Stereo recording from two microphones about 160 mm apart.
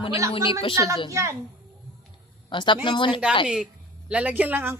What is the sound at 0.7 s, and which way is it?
Speech, 20° right (ahead or behind).